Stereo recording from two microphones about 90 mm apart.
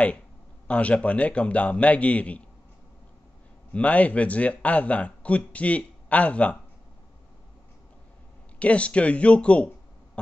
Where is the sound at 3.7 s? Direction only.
15° left (ahead or behind).